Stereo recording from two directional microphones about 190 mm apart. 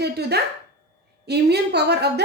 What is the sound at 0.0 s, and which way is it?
A woman's voice, 60° right (ahead or behind).